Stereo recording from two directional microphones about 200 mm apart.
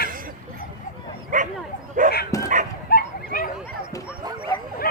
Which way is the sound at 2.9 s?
45° left (ahead or behind).